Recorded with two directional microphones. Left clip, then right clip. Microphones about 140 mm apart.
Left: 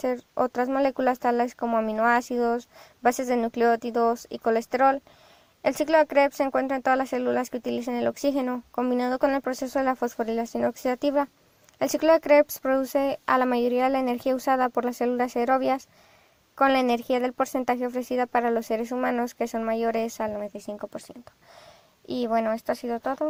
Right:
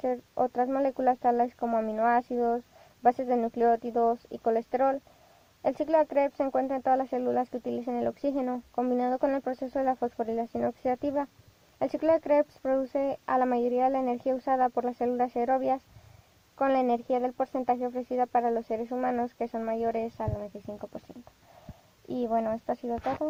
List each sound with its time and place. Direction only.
0.0 s speech: 25° left (ahead or behind)
22.1 s speech: 20° left (ahead or behind)